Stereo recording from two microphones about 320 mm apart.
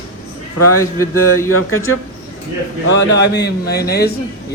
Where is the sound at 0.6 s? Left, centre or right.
Left.